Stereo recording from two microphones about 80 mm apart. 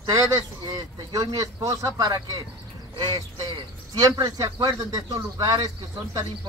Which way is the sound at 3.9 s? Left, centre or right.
Right.